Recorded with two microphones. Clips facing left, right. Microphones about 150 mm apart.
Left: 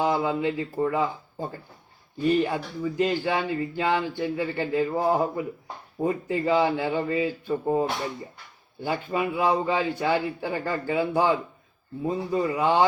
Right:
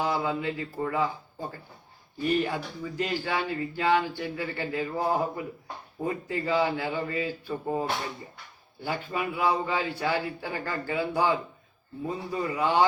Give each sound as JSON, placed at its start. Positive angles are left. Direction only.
{"t": 0.0, "sound": "a man's voice", "side_deg": 20}